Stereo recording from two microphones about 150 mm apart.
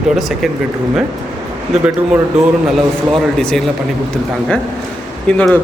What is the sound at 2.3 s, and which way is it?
A man's voice, 5° right (ahead or behind).